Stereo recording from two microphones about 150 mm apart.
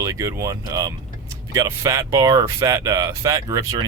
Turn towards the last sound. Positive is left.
turn(degrees=-20)  # may be behind; listen again after turning